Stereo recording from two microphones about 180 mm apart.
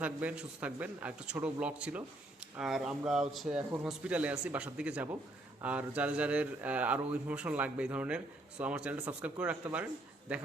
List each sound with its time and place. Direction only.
0.0 s speech: 5° right (ahead or behind)